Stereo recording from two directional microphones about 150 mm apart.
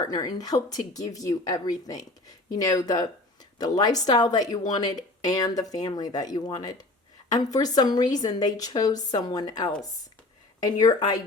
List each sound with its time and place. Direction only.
0.0 s a woman's voice: 25° left (ahead or behind)